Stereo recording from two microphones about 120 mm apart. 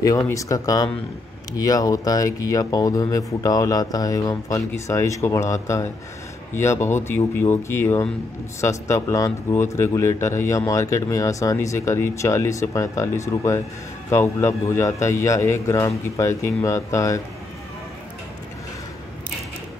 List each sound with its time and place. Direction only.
0.0 s speech: 30° left (ahead or behind)